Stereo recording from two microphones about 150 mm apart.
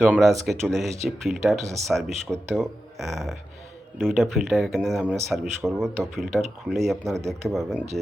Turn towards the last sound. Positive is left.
turn(degrees=0)  # may be behind; listen again after turning